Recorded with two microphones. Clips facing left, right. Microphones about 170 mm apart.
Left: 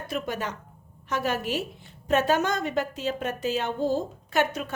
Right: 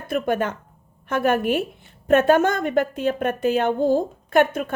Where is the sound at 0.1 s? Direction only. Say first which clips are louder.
Right 9 dB; 55° right (ahead or behind).